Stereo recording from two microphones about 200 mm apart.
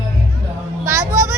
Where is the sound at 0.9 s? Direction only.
15° right (ahead or behind).